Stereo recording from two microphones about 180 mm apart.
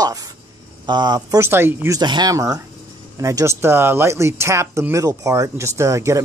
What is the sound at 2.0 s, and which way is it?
Speech, 25° right (ahead or behind).